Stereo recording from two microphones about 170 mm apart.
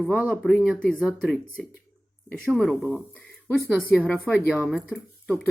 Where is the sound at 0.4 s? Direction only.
Centre (ahead or behind).